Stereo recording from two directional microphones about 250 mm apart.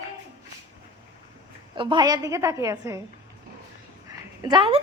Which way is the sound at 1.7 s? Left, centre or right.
Centre.